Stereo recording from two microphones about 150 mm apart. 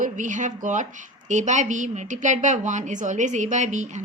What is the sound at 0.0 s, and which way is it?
A woman's voice, 55° right (ahead or behind).